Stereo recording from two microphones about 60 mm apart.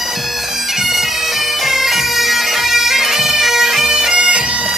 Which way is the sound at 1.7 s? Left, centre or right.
Centre.